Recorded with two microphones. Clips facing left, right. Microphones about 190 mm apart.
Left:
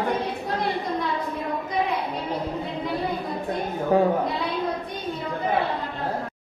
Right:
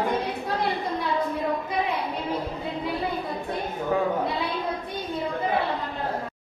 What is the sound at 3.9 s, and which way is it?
Speech, 35° left (ahead or behind).